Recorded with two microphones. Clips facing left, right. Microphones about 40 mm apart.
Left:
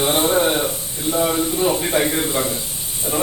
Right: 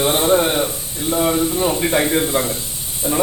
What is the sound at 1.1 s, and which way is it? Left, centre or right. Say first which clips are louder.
Speech: right 2 dB; centre.